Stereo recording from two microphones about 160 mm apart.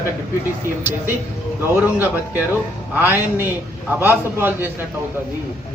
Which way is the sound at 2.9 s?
15° right (ahead or behind).